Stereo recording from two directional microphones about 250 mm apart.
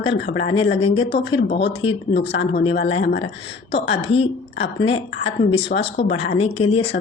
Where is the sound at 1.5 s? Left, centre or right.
Left.